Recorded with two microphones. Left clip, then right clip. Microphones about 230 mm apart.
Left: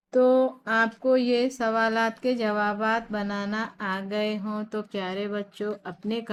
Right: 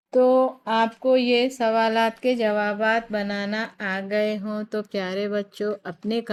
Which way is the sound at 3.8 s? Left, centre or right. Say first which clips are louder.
Right 6 dB; right.